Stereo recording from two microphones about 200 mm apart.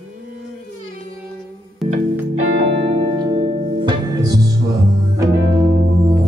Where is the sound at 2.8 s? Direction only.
30° right (ahead or behind).